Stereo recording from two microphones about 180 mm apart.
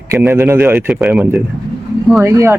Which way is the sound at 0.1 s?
15° right (ahead or behind).